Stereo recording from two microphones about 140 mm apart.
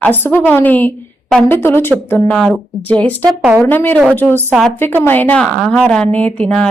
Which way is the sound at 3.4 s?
10° right (ahead or behind).